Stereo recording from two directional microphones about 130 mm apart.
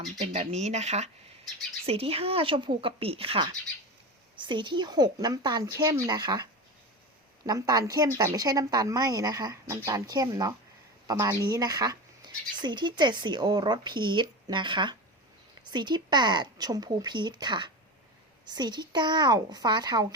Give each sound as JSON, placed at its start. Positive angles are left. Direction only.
{"t": 0.2, "sound": "a woman's voice", "side_deg": -55}